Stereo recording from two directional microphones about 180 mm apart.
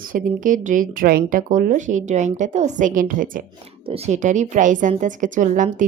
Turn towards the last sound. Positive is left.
turn(degrees=-45)  # may be behind; listen again after turning